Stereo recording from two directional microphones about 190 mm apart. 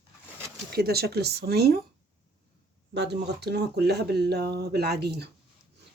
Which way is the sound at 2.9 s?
60° right (ahead or behind).